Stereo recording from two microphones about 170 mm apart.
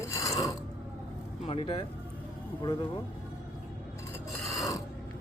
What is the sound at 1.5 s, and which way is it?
Speech, 30° left (ahead or behind).